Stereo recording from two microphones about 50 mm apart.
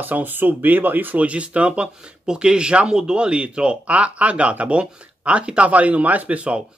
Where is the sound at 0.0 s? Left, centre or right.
Right.